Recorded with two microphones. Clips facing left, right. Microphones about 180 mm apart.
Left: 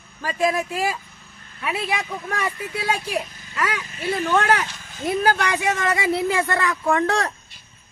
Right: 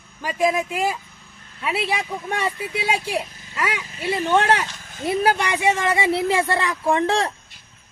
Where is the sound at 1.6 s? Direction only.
30° right (ahead or behind).